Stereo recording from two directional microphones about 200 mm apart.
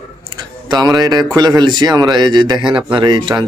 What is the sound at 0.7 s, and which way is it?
A man's voice, 20° right (ahead or behind).